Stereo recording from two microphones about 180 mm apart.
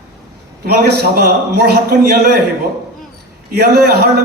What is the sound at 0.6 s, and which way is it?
A man's voice, 65° right (ahead or behind).